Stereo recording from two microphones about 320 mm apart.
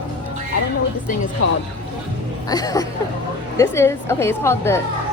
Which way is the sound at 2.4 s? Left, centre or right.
Centre.